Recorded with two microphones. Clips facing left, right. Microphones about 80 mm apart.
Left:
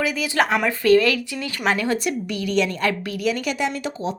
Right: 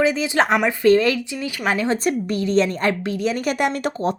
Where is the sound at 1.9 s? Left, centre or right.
Right.